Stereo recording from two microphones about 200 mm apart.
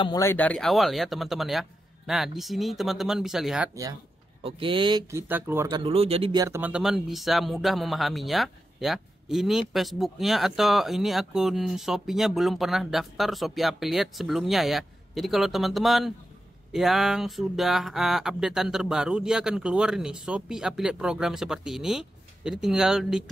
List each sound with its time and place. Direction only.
0.0 s speech: 15° left (ahead or behind); by 3.7 s 5° right (ahead or behind)
4.4 s speech: 25° right (ahead or behind); by 5.8 s 10° right (ahead or behind)
5.9 s speech: 30° right (ahead or behind)
6.4 s speech: 10° right (ahead or behind)